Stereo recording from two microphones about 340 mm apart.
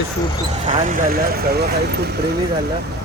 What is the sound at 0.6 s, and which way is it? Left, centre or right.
Speech, right.